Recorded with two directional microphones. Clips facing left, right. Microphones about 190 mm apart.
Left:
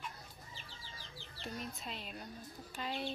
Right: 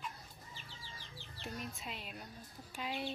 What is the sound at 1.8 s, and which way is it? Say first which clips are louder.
Speech: left 1 dB; 5° right (ahead or behind).